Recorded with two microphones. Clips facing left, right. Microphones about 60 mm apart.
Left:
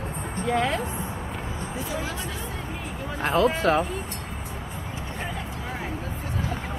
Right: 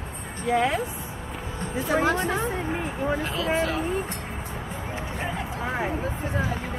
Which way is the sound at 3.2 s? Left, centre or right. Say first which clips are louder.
Left 7 dB; left.